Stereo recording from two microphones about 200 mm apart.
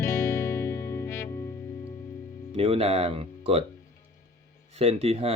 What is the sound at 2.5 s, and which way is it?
Speech, 30° right (ahead or behind).